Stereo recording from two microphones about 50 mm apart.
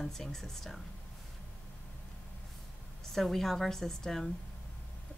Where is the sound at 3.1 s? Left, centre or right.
Centre.